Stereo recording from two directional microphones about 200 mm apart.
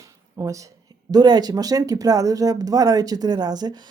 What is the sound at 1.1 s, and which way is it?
Speech, 20° right (ahead or behind).